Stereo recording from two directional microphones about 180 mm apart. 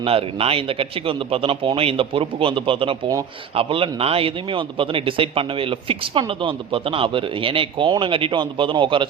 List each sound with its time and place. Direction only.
0.0 s a man's voice: 30° right (ahead or behind)